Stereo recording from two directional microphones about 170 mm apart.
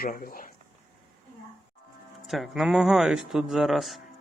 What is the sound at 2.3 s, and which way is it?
Speech, centre (ahead or behind).